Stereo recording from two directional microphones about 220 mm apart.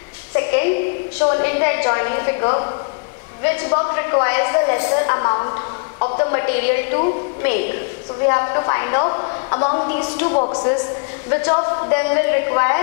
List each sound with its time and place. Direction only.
0.4 s a sound: 15° left (ahead or behind)
1.2 s a woman's voice: 20° left (ahead or behind)
8.3 s a woman's voice: 20° left (ahead or behind)
10.3 s a woman's voice: 25° left (ahead or behind)